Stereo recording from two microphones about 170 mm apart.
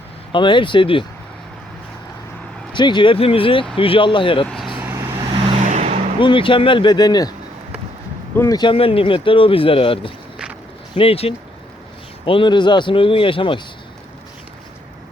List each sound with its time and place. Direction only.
0.3 s speech: 30° left (ahead or behind)
2.7 s speech: 25° left (ahead or behind)
4.4 s vehicle: centre (ahead or behind)
4.8 s vehicle: 15° right (ahead or behind)
5.6 s vehicle: 40° right (ahead or behind)
6.1 s speech: 30° left (ahead or behind)
8.4 s speech: 20° left (ahead or behind)